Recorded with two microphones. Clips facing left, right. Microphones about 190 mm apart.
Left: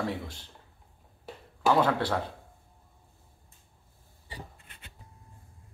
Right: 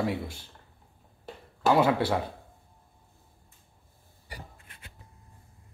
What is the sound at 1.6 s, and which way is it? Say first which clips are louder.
Speech: right 2 dB; 10° right (ahead or behind).